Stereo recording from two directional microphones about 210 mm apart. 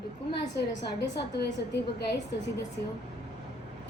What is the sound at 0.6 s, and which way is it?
Speech, 50° left (ahead or behind).